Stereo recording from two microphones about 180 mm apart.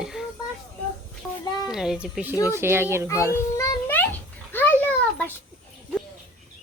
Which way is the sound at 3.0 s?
15° left (ahead or behind).